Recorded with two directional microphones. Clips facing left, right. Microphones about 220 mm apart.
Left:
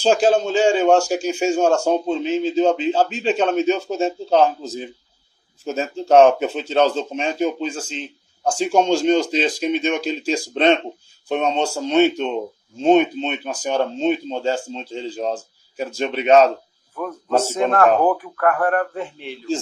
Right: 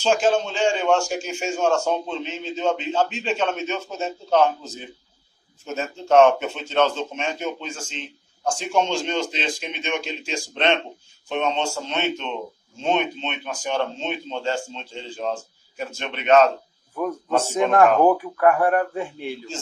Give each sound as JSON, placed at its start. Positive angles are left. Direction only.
{"t": 0.0, "sound": "a man's voice", "side_deg": 35}
{"t": 18.0, "sound": "speech", "side_deg": -10}